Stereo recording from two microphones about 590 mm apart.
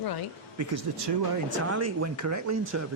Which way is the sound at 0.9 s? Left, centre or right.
Right.